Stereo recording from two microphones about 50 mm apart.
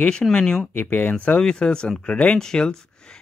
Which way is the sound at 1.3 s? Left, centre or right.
Centre.